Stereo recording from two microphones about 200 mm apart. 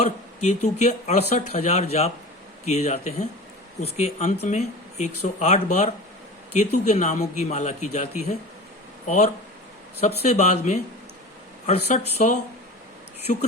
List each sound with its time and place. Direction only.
0.0 s speech: 35° left (ahead or behind)